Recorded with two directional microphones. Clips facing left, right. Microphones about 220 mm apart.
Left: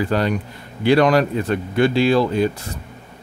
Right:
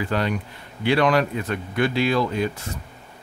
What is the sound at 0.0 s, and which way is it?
Speech, 40° left (ahead or behind).